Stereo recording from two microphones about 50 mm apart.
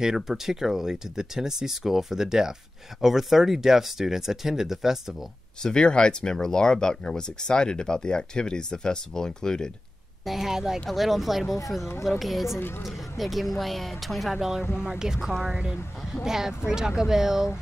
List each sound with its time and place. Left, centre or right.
0.0 s speech: centre
5.6 s speech: centre
10.2 s speech: centre